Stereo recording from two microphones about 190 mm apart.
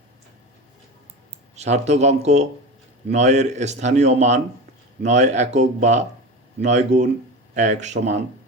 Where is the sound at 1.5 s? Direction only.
35° right (ahead or behind).